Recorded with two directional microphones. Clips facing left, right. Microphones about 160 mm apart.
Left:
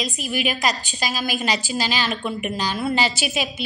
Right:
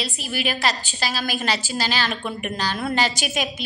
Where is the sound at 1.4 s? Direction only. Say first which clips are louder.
Left 1 dB; 10° left (ahead or behind).